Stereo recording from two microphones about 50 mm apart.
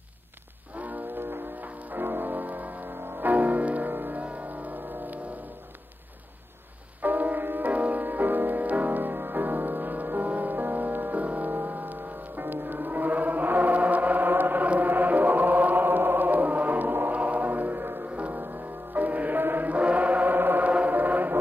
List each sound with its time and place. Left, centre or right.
0.7 s music: right
3.3 s music: right
7.0 s music: right
14.7 s chant: right
17.1 s music: right
19.4 s chant: right
20.3 s music: right